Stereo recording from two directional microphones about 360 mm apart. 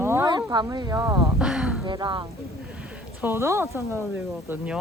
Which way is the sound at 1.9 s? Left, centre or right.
Centre.